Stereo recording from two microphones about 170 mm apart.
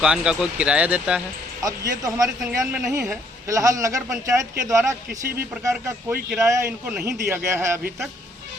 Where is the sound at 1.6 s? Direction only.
20° right (ahead or behind).